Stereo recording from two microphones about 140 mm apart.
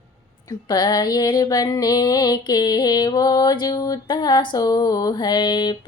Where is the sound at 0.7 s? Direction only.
30° left (ahead or behind).